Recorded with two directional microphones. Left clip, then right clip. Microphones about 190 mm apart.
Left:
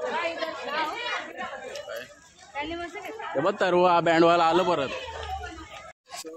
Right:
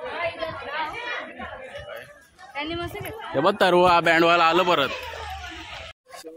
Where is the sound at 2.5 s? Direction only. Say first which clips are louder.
Right 3 dB; 50° right (ahead or behind).